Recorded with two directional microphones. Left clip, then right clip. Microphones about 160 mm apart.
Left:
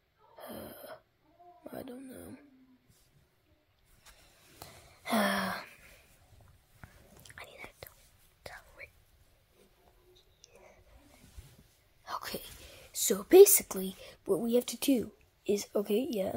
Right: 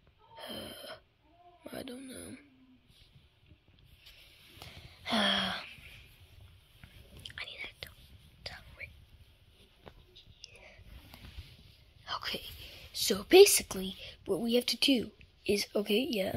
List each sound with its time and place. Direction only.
0.4 s wheeze: 10° left (ahead or behind)
1.7 s speech: 5° left (ahead or behind)
4.6 s a sound: 30° left (ahead or behind)
7.3 s whispering: 25° left (ahead or behind)
10.5 s whispering: centre (ahead or behind)
12.0 s whispering: 30° left (ahead or behind)
12.9 s a woman's voice: 15° left (ahead or behind)
13.8 s a sound: 30° left (ahead or behind)
14.4 s a woman's voice: 10° left (ahead or behind)